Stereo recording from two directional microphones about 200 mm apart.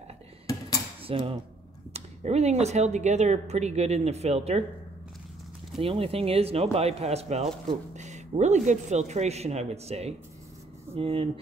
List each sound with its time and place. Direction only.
1.0 s speech: 30° right (ahead or behind)
5.8 s speech: 30° right (ahead or behind)